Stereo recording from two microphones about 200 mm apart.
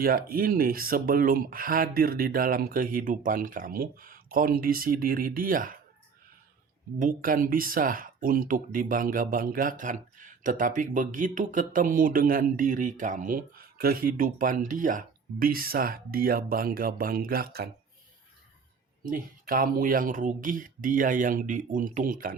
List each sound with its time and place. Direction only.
0.0 s speech: 50° right (ahead or behind)
7.0 s speech: 45° right (ahead or behind)
19.0 s speech: 45° right (ahead or behind)